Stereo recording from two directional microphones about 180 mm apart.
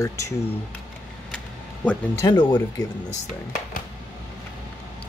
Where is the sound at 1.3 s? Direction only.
5° left (ahead or behind).